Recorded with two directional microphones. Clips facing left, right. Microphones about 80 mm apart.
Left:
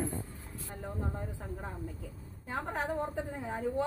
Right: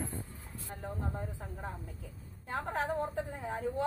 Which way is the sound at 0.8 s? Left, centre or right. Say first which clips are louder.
Left 1 dB; centre.